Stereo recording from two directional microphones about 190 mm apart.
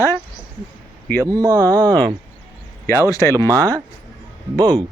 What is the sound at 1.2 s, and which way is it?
Speech, 20° right (ahead or behind).